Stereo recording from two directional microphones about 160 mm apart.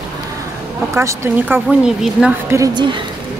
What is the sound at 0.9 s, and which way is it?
Speech, 15° right (ahead or behind).